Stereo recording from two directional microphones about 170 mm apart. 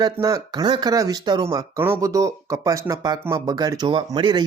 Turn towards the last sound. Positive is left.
turn(degrees=-25)  # may be behind; listen again after turning